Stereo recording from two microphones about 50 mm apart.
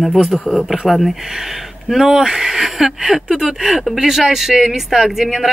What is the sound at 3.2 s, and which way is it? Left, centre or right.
Speech, centre.